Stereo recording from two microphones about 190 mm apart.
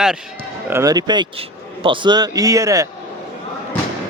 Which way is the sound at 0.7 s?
20° right (ahead or behind).